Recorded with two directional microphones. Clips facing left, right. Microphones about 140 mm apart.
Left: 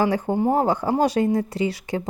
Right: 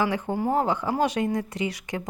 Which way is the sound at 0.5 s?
40° left (ahead or behind).